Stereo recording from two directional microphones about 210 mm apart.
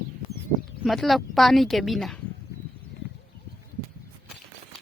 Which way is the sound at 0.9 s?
Centre (ahead or behind).